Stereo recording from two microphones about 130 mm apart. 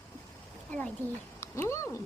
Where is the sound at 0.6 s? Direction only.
10° left (ahead or behind).